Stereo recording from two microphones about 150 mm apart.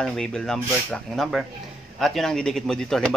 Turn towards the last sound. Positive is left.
turn(degrees=5)  # may be behind; listen again after turning